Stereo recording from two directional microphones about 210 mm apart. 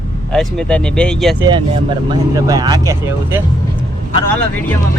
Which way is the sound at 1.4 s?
20° right (ahead or behind).